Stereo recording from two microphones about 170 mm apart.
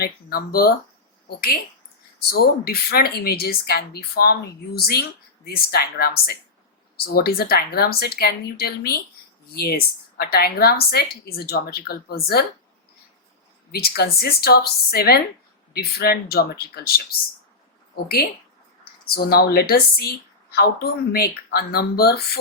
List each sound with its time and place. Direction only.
0.0 s a woman's voice: 65° left (ahead or behind)
2.3 s a woman's voice: 60° left (ahead or behind)
13.7 s a woman's voice: 65° left (ahead or behind)
19.1 s a woman's voice: 65° left (ahead or behind)